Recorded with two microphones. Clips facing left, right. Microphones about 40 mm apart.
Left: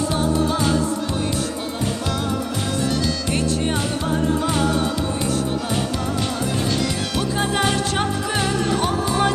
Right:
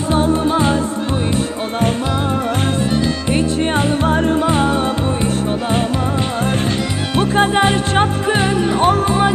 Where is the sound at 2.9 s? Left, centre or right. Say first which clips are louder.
Right 5 dB; right.